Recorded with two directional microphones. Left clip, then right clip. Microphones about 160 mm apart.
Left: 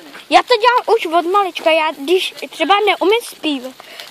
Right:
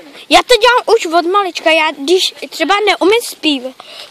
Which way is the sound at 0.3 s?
55° right (ahead or behind).